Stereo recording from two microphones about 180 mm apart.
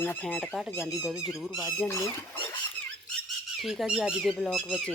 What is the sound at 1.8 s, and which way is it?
Speech, 10° left (ahead or behind).